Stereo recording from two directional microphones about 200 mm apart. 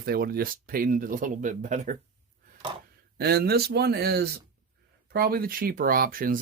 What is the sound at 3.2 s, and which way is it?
Speech, 50° right (ahead or behind).